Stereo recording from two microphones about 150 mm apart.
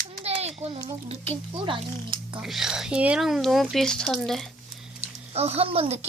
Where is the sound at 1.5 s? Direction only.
35° right (ahead or behind).